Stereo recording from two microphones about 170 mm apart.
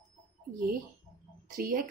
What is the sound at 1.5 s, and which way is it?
Speech, 55° right (ahead or behind).